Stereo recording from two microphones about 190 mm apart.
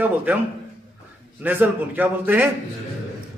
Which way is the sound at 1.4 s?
10° right (ahead or behind).